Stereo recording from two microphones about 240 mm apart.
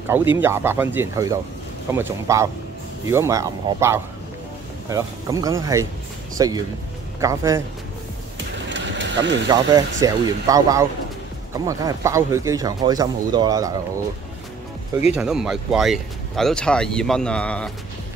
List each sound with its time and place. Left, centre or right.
0.4 s speech: centre
8.6 s vehicle: right
9.5 s speech: centre
15.1 s speech: centre